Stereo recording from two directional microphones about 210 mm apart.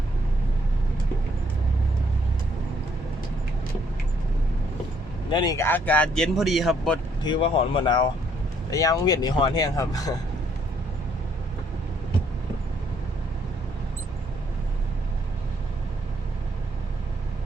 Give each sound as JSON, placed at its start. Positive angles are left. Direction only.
{"t": 5.3, "sound": "speech", "side_deg": 20}
{"t": 7.3, "sound": "speech", "side_deg": 25}